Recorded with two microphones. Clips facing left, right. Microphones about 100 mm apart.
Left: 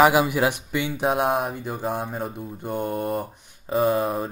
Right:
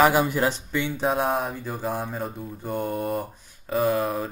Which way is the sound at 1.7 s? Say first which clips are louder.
Left 1 dB; centre (ahead or behind).